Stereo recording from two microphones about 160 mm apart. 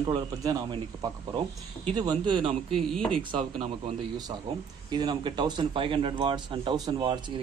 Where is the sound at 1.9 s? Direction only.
30° right (ahead or behind).